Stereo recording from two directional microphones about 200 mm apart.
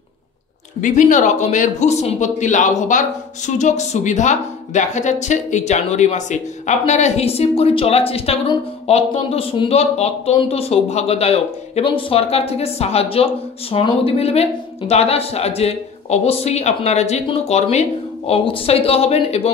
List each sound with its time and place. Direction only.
0.7 s speech: 40° left (ahead or behind)